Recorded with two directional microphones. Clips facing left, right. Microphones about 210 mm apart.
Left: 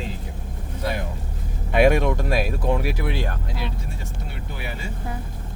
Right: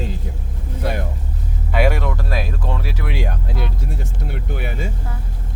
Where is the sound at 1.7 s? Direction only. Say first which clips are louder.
Left 3 dB; 20° left (ahead or behind).